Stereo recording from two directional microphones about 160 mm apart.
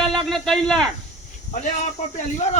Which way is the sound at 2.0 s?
45° left (ahead or behind).